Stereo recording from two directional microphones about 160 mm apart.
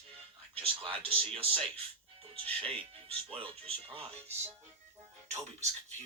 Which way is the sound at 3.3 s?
35° right (ahead or behind).